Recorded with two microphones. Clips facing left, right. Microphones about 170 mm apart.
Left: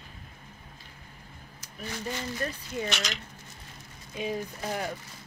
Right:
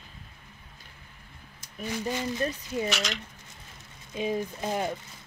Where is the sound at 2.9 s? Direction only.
Centre (ahead or behind).